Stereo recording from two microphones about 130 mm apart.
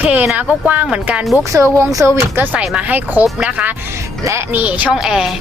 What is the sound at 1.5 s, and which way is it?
Speech, 25° right (ahead or behind).